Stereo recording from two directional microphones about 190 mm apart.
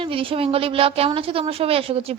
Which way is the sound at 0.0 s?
30° right (ahead or behind).